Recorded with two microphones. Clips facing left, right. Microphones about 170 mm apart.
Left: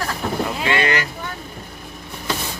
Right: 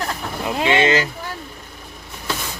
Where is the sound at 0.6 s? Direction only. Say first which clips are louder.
Right 5 dB; 20° right (ahead or behind).